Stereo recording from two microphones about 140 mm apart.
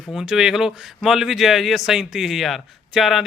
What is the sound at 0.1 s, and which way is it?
A man's voice, 5° right (ahead or behind).